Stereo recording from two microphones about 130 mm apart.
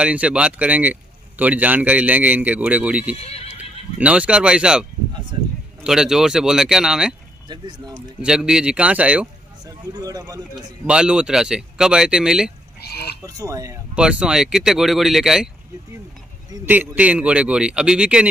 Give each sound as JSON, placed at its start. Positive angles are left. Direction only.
{"t": 0.0, "sound": "a man's voice", "side_deg": -10}
{"t": 3.2, "sound": "horse", "side_deg": 50}
{"t": 4.0, "sound": "a man's voice", "side_deg": -10}
{"t": 5.3, "sound": "speech", "side_deg": -35}
{"t": 5.9, "sound": "speech", "side_deg": -5}
{"t": 7.4, "sound": "speech", "side_deg": -35}
{"t": 8.2, "sound": "a man's voice", "side_deg": -5}
{"t": 9.7, "sound": "speech", "side_deg": -30}
{"t": 10.5, "sound": "speech", "side_deg": -5}
{"t": 13.2, "sound": "speech", "side_deg": -25}
{"t": 13.9, "sound": "speech", "side_deg": -5}
{"t": 16.6, "sound": "a man's voice", "side_deg": -15}